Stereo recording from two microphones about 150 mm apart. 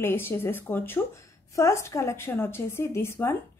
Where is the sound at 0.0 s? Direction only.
15° left (ahead or behind).